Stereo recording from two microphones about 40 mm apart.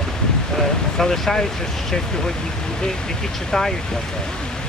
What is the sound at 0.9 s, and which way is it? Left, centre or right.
Speech, centre.